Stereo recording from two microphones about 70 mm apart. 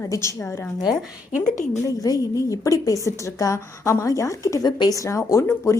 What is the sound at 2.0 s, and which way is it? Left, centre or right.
A woman's voice, left.